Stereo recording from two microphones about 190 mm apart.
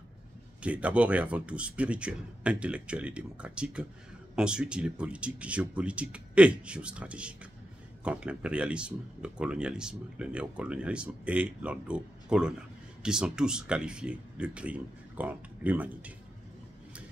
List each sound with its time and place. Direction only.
0.6 s a man's voice: 5° right (ahead or behind)